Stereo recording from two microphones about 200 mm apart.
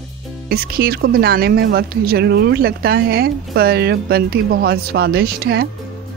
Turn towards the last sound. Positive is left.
turn(degrees=-50)  # may be behind; listen again after turning